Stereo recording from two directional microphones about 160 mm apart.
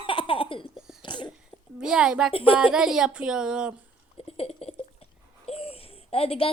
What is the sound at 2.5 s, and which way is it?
A woman's voice, 5° right (ahead or behind).